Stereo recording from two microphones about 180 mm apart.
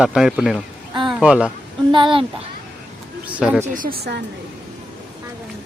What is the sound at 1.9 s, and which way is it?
Speech, 30° right (ahead or behind).